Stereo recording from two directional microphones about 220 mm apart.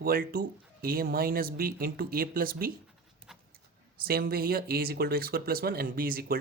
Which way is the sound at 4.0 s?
45° right (ahead or behind).